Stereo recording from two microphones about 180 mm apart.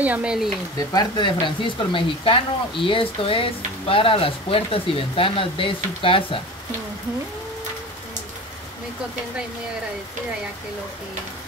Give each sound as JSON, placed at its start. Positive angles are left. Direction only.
{"t": 0.0, "sound": "speech", "side_deg": -5}
{"t": 0.7, "sound": "speech", "side_deg": 25}